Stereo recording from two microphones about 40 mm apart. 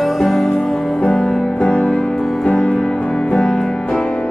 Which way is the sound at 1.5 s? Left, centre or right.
Left.